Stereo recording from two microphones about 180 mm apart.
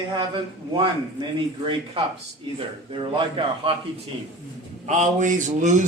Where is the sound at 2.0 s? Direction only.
30° right (ahead or behind).